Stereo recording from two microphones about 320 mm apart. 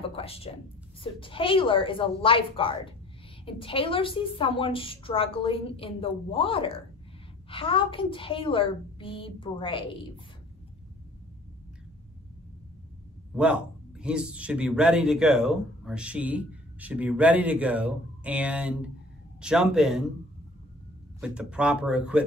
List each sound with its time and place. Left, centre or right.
0.0 s a woman's voice: centre
13.3 s a man's voice: centre
21.2 s a man's voice: centre